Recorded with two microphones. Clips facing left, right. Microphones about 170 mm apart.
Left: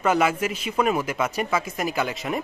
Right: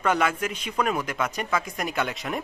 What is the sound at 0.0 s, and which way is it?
Speech, 5° left (ahead or behind).